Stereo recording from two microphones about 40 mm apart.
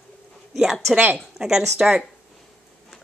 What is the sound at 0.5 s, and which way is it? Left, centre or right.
Speech, centre.